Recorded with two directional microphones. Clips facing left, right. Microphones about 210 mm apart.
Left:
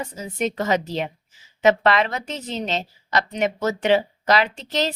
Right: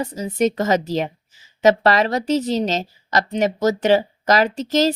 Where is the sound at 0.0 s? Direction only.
40° right (ahead or behind).